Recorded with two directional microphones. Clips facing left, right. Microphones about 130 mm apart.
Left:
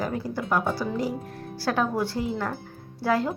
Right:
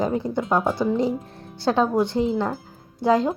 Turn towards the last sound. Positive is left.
turn(degrees=-20)  # may be behind; listen again after turning